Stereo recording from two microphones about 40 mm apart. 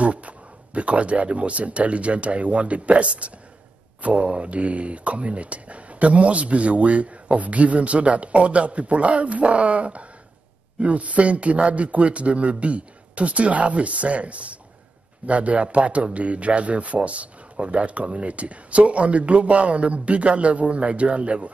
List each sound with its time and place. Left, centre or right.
0.0 s speech: right